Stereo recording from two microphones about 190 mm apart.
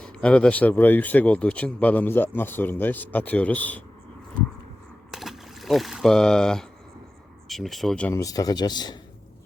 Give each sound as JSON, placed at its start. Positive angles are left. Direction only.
{"t": 0.0, "sound": "speech", "side_deg": 5}
{"t": 5.1, "sound": "speech", "side_deg": 0}